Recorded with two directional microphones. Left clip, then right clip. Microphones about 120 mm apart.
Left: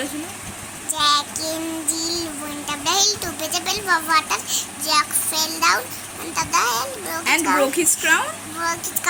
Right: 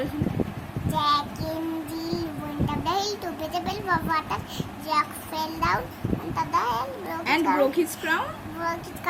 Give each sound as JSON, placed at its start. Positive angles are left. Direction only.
{"t": 0.9, "sound": "child singing", "side_deg": -15}
{"t": 2.6, "sound": "a child's voice", "side_deg": -20}
{"t": 7.3, "sound": "a woman's voice", "side_deg": 10}
{"t": 7.6, "sound": "a woman's voice", "side_deg": 20}